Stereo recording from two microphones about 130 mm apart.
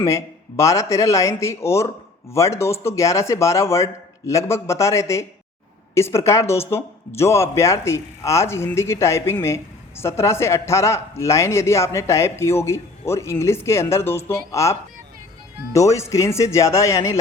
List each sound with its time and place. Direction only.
0.0 s speech: 20° left (ahead or behind)